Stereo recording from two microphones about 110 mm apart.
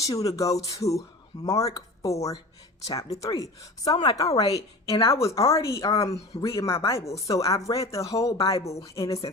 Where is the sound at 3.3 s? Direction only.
35° left (ahead or behind).